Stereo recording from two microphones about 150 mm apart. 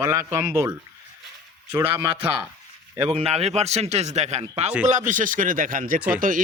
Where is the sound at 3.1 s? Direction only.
45° right (ahead or behind).